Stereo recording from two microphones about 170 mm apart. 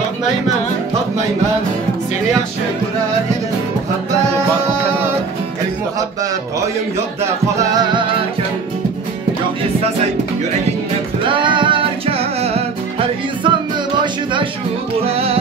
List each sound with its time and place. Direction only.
7.5 s music: 20° right (ahead or behind)
11.2 s music: 30° right (ahead or behind)
15.0 s music: 35° right (ahead or behind)